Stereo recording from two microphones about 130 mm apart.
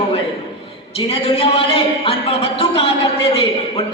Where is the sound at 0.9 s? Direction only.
45° left (ahead or behind).